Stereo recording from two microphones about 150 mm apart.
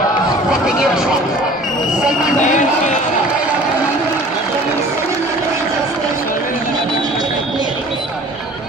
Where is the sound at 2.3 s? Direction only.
55° left (ahead or behind).